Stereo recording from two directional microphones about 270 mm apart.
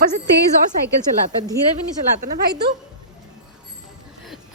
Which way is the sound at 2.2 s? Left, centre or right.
Right.